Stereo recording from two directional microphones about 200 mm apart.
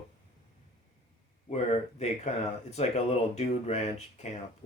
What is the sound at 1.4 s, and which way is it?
Speech, 35° left (ahead or behind).